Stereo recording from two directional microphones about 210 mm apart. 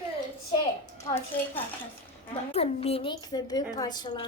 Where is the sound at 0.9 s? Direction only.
10° left (ahead or behind).